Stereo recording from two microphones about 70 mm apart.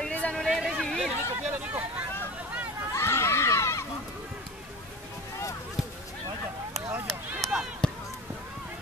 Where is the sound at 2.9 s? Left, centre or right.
Left.